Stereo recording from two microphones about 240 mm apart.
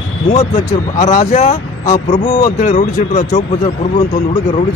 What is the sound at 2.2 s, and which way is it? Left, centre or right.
Speech, centre.